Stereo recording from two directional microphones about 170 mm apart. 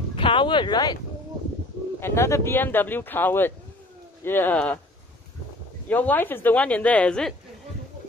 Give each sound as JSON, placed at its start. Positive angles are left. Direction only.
{"t": 0.1, "sound": "speech", "side_deg": 30}
{"t": 2.0, "sound": "speech", "side_deg": 15}
{"t": 5.9, "sound": "speech", "side_deg": 10}